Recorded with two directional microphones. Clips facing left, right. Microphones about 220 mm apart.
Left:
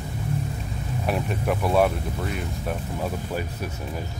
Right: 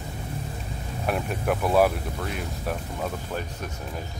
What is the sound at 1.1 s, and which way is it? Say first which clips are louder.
Speech: even; centre (ahead or behind).